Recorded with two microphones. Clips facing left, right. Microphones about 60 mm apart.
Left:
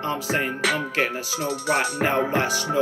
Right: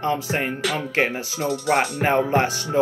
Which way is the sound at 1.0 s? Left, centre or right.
Right.